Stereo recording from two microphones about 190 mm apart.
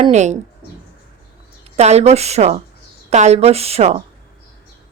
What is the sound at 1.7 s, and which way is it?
A woman's voice, 35° right (ahead or behind).